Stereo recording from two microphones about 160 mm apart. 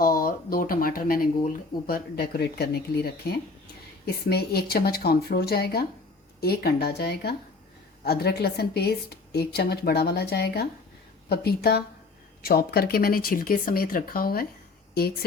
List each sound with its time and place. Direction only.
0.0 s speech: 65° left (ahead or behind)